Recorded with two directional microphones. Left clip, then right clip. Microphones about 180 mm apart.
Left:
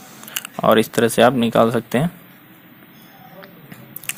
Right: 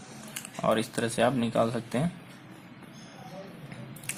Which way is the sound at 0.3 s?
40° left (ahead or behind).